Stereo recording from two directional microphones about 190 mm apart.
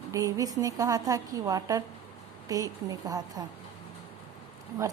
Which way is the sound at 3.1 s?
20° right (ahead or behind).